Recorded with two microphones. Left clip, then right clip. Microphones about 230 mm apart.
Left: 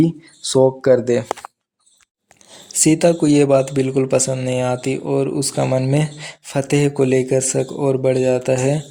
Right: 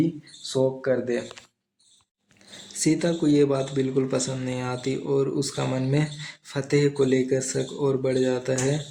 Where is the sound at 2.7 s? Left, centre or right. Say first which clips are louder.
Left 10 dB; left.